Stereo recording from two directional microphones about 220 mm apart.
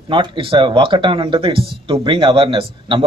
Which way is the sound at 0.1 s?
25° right (ahead or behind).